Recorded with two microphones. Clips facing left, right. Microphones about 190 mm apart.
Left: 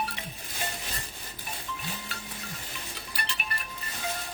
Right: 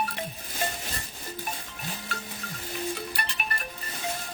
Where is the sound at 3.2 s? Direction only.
50° right (ahead or behind).